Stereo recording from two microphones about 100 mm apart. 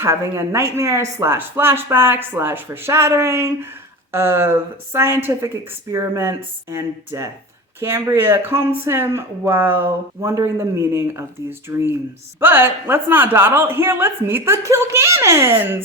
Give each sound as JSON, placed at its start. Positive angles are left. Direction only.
{"t": 0.0, "sound": "speech", "side_deg": -25}